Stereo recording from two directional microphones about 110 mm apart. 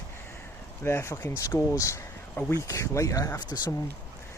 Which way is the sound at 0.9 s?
25° left (ahead or behind).